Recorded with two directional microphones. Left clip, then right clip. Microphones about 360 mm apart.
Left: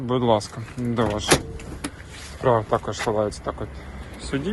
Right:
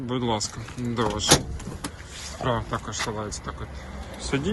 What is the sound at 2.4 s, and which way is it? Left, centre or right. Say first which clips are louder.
Speech: left 8 dB; centre.